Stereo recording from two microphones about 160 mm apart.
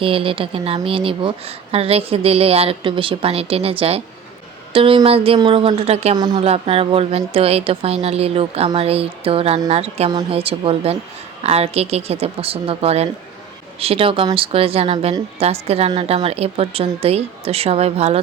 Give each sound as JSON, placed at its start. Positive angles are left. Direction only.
{"t": 0.0, "sound": "speech", "side_deg": -35}
{"t": 6.1, "sound": "a woman's voice", "side_deg": -25}
{"t": 6.4, "sound": "speech", "side_deg": -40}